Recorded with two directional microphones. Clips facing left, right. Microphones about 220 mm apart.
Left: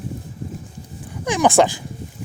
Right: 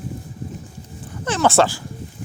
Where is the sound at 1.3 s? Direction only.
15° left (ahead or behind).